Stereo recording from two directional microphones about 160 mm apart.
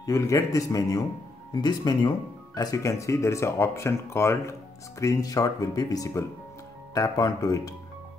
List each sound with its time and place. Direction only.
0.0 s speech: 20° left (ahead or behind)